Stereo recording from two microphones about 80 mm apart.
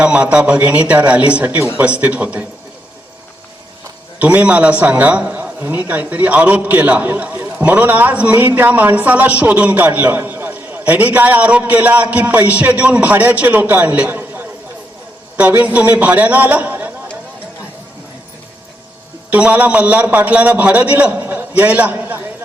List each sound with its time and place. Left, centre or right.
0.0 s speech: centre
4.2 s a man's voice: centre
15.6 s a man's voice: centre
19.3 s a man's voice: centre